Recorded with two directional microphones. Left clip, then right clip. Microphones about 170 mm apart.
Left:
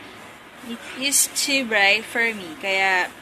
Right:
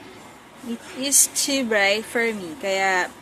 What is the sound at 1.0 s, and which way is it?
Speech, 40° right (ahead or behind).